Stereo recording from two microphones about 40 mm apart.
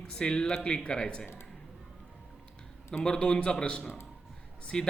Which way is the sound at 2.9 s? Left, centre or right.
Centre.